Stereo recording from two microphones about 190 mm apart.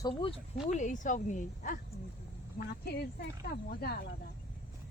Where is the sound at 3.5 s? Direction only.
50° left (ahead or behind).